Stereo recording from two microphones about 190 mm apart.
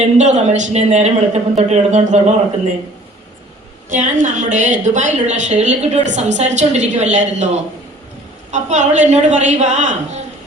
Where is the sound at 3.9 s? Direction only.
40° right (ahead or behind).